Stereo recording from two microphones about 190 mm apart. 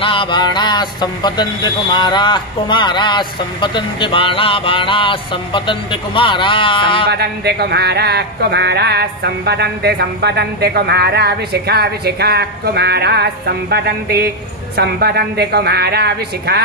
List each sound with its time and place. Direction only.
0.0 s speech: 25° left (ahead or behind)
7.1 s speech: 60° right (ahead or behind)